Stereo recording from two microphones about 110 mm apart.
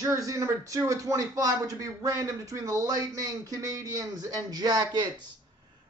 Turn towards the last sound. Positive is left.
turn(degrees=-40)  # may be behind; listen again after turning